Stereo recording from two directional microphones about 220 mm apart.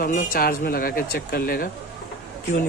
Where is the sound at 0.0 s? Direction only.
40° left (ahead or behind).